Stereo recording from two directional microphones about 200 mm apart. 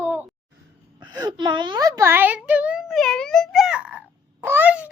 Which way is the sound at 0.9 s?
20° right (ahead or behind).